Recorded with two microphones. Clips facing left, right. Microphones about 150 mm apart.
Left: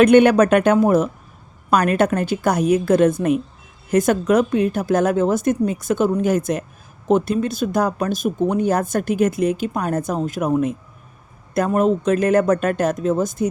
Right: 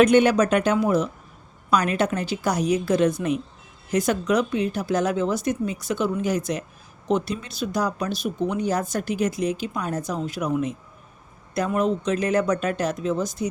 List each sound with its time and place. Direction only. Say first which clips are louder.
0.0 s speech: left 5 dB; 60° left (ahead or behind)